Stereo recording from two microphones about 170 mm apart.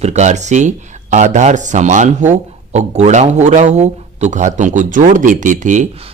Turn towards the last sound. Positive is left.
turn(degrees=-40)  # may be behind; listen again after turning